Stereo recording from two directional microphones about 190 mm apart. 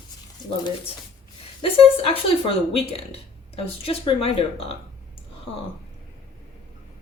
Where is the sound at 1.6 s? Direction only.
30° left (ahead or behind).